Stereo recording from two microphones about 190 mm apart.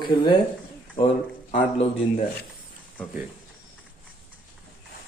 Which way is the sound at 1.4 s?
30° left (ahead or behind).